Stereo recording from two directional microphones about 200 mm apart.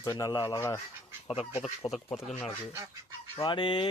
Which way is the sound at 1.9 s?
Centre (ahead or behind).